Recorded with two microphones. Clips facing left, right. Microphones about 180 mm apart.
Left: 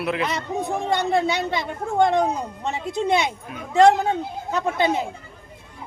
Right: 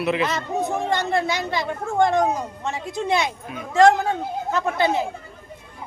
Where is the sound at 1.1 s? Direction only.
20° left (ahead or behind).